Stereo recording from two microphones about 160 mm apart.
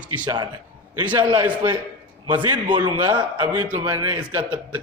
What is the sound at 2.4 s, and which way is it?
Speech, 30° right (ahead or behind).